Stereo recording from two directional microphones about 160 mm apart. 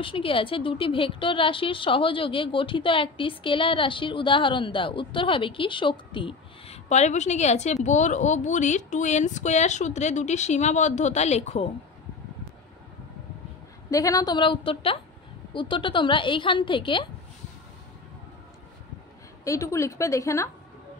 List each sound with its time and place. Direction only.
0.0 s a woman's voice: 35° left (ahead or behind)
6.9 s a woman's voice: 45° left (ahead or behind)
13.8 s a woman's voice: 20° left (ahead or behind)
19.4 s a woman's voice: 20° left (ahead or behind)